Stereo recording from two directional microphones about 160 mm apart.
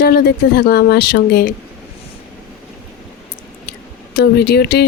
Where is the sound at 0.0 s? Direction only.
75° left (ahead or behind).